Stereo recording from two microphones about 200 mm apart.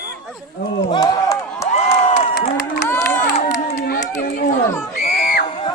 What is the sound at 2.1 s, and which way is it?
Crowd, 35° left (ahead or behind).